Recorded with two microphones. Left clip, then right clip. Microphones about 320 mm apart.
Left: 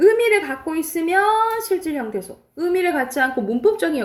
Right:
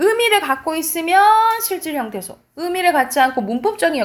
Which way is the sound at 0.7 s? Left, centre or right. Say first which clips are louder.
Right 2 dB; right.